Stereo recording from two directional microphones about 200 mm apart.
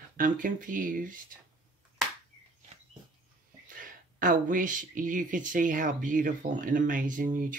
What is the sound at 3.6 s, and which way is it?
Speech, 40° right (ahead or behind).